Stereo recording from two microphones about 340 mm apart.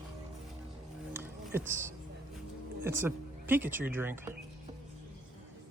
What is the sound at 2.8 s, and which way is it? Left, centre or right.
Speech, centre.